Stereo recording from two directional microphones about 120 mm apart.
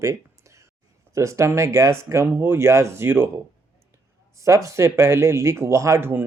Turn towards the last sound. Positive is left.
turn(degrees=-20)  # may be behind; listen again after turning